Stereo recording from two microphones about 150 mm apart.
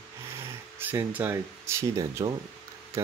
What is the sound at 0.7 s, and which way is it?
Speech, 15° right (ahead or behind).